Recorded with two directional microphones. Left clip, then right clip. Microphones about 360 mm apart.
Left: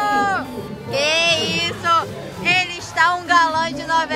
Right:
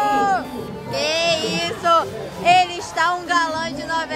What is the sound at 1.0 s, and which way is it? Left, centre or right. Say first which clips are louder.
Music: left 3 dB; centre.